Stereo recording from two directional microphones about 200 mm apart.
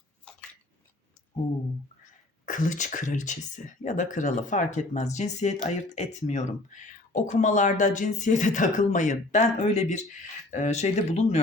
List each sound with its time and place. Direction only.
2.5 s speech: 40° left (ahead or behind)